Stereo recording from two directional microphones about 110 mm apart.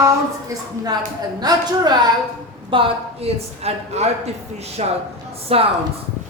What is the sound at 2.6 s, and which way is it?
A woman's voice, 60° right (ahead or behind).